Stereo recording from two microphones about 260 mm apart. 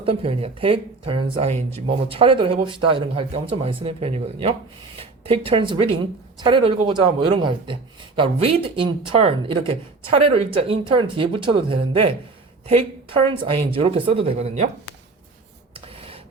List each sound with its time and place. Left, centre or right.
0.0 s speech: right